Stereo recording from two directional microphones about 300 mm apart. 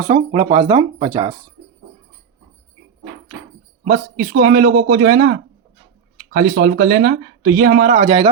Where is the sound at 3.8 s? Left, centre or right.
Right.